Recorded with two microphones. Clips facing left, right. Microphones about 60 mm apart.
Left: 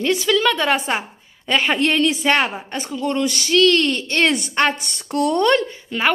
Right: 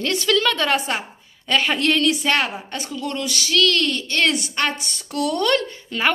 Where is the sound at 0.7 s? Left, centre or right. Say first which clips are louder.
Left 1 dB; left.